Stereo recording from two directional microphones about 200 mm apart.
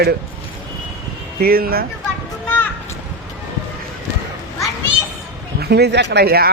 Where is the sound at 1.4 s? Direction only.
50° right (ahead or behind).